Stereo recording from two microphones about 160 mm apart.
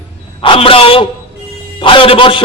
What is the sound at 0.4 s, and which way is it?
A man's voice, 35° left (ahead or behind).